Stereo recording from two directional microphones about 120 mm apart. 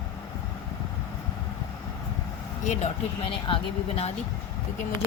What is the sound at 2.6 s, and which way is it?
Speech, 80° left.